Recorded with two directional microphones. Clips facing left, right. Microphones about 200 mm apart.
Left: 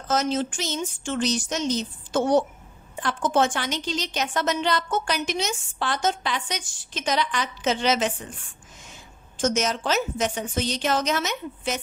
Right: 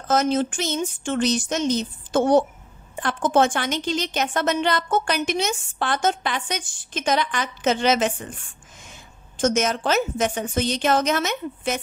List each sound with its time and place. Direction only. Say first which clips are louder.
0.1 s a woman's voice: right 4 dB; 55° right (ahead or behind)
9.4 s a woman's voice: right 3 dB; 55° right (ahead or behind)